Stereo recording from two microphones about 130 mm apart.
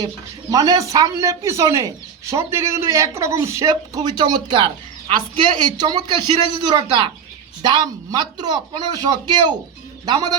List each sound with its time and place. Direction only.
0.5 s speech: 30° right (ahead or behind)
4.2 s a woman's voice: 35° right (ahead or behind)